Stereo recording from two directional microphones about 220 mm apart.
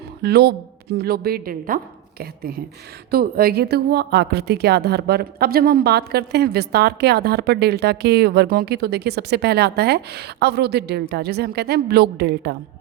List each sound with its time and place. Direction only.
0.2 s a woman's voice: 45° right (ahead or behind)